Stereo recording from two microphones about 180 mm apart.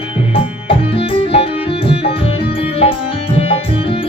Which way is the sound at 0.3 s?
30° left (ahead or behind).